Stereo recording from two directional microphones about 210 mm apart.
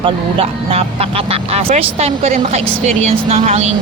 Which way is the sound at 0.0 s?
25° right (ahead or behind).